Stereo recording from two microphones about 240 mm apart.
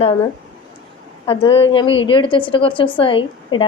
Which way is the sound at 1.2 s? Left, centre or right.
Left.